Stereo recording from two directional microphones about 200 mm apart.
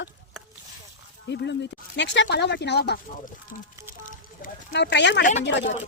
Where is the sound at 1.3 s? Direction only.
60° left (ahead or behind).